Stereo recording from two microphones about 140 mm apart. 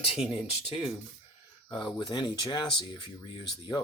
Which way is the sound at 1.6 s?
30° left (ahead or behind).